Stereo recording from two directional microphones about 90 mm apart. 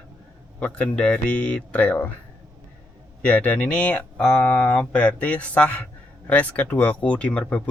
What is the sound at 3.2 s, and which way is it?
Speech, 15° left (ahead or behind).